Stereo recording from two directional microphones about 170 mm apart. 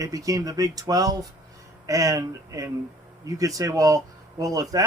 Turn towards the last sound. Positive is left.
turn(degrees=-20)  # may be behind; listen again after turning